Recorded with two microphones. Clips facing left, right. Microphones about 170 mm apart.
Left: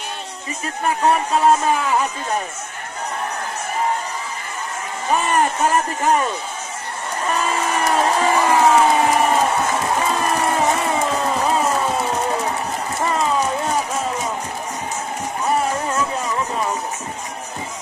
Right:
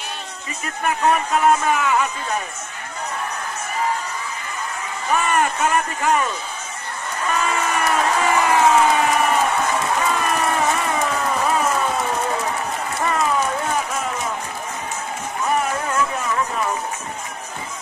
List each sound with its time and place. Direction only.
0.8 s speech: 30° left (ahead or behind)
5.1 s speech: 35° left (ahead or behind)
7.2 s crowd: 35° left (ahead or behind)
10.1 s music: 30° left (ahead or behind)
11.4 s a sound: 25° left (ahead or behind)
13.0 s run: 25° left (ahead or behind)
15.4 s music: 20° left (ahead or behind)